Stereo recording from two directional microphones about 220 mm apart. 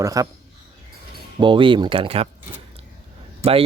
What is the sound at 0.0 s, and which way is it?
Speech, 15° right (ahead or behind).